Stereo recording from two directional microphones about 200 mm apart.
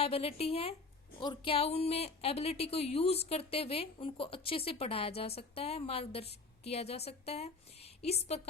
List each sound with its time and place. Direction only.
0.0 s a woman's voice: 30° left (ahead or behind)